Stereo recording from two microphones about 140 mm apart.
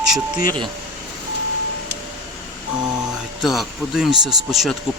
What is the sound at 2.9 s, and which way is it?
Speech, 5° right (ahead or behind).